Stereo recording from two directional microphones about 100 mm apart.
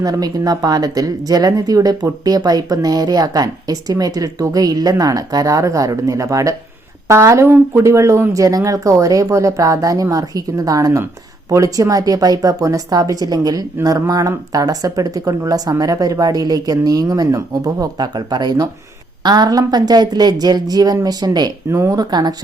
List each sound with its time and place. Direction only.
0.0 s a woman's voice: 40° right (ahead or behind)
21.7 s a woman's voice: 30° right (ahead or behind)
22.1 s speech: 40° right (ahead or behind)